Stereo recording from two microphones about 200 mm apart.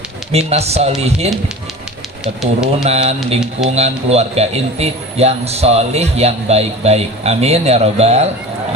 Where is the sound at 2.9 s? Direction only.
30° right (ahead or behind).